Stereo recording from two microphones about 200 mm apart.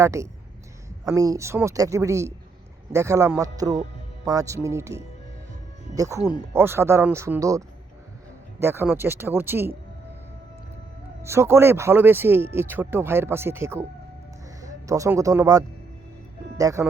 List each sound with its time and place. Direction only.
0.0 s speech: 15° right (ahead or behind)
6.5 s speech: 10° right (ahead or behind)
11.2 s speech: 15° right (ahead or behind)
14.8 s speech: 15° right (ahead or behind)